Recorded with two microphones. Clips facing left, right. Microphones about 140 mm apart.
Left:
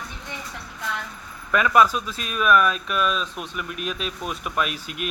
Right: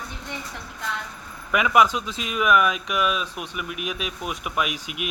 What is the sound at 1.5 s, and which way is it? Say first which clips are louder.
Speech: left 1 dB; 15° right (ahead or behind).